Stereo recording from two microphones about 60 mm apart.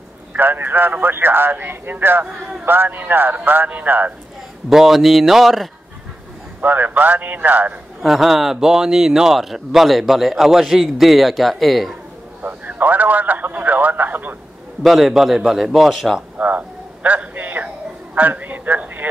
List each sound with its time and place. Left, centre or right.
0.4 s speech: right
4.6 s speech: centre
6.6 s a man's voice: right
8.0 s speech: centre
12.4 s a sound: right
14.8 s speech: centre
16.3 s a sound: right